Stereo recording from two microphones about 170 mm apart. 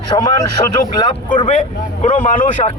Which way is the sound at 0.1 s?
25° left (ahead or behind).